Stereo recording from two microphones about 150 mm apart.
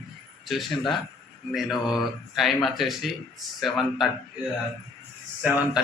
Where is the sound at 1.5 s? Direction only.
Centre (ahead or behind).